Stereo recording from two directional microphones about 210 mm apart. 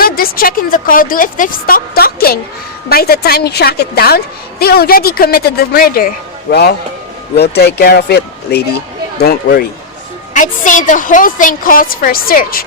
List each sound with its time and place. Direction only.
0.0 s a woman's voice: 45° left (ahead or behind)